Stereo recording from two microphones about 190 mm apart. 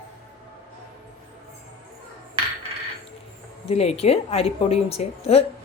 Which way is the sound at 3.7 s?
35° left (ahead or behind).